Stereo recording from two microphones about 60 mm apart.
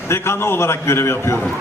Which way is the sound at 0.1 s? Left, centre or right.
Left.